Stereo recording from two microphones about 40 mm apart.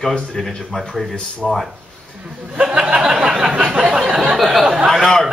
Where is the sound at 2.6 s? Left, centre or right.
Right.